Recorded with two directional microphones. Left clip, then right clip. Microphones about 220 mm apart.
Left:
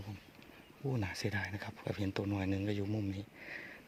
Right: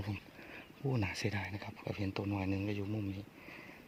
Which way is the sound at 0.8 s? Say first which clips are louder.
Right 1 dB; centre (ahead or behind).